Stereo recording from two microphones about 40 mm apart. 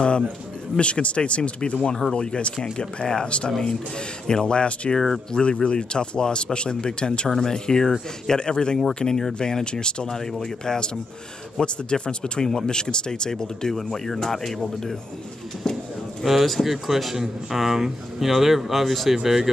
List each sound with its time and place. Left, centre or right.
0.7 s a man's voice: left; by 19.5 s centre